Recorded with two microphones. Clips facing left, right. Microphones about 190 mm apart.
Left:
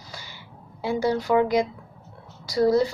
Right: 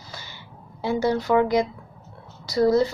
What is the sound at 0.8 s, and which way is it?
A woman's voice, 10° left (ahead or behind).